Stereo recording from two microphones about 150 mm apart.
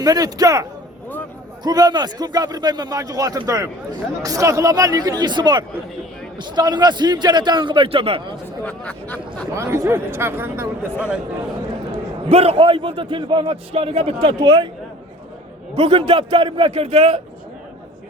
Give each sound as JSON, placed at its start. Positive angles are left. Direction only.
{"t": 0.0, "sound": "speech", "side_deg": -25}
{"t": 8.6, "sound": "a sound", "side_deg": 10}
{"t": 9.6, "sound": "speech", "side_deg": -20}
{"t": 11.9, "sound": "a man's voice", "side_deg": -40}
{"t": 15.7, "sound": "a man's voice", "side_deg": -30}